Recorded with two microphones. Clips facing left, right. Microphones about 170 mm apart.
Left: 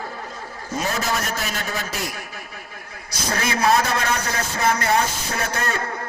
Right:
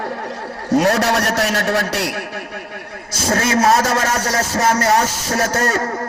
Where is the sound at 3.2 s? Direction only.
40° right (ahead or behind).